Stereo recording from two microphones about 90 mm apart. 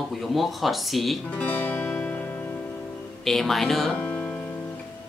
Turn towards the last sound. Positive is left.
turn(degrees=15)  # may be behind; listen again after turning